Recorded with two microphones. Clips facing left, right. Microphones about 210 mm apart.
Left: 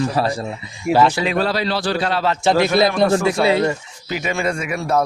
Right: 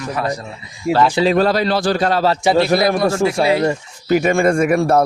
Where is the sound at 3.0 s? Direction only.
25° right (ahead or behind).